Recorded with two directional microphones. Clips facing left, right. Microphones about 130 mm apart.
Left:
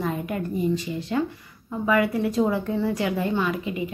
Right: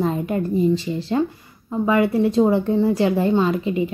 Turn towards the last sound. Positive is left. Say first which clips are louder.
# right 6 dB
turn(degrees=-30)  # may be behind; listen again after turning